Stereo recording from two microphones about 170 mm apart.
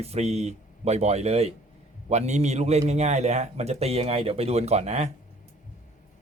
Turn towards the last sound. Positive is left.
turn(degrees=-40)  # may be behind; listen again after turning